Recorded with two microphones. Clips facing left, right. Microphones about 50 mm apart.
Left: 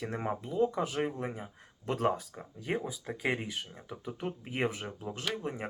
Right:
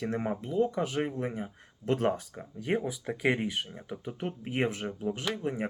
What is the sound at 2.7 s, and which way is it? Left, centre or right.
Speech, centre.